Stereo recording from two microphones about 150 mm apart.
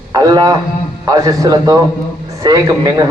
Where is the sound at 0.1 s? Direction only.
25° right (ahead or behind).